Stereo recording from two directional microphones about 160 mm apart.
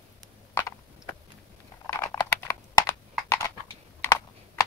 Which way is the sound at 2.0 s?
25° left (ahead or behind).